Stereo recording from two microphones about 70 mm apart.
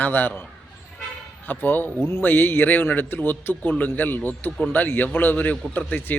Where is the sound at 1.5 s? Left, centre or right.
Left.